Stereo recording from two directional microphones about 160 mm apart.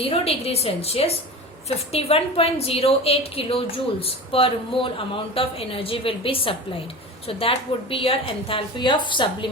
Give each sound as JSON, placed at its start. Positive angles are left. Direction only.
{"t": 0.0, "sound": "a woman's voice", "side_deg": 40}